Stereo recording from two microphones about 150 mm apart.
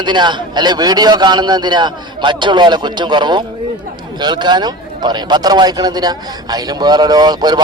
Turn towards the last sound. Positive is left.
turn(degrees=-25)  # may be behind; listen again after turning